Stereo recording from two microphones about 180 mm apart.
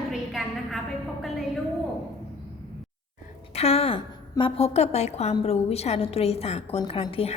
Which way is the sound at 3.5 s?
35° left (ahead or behind).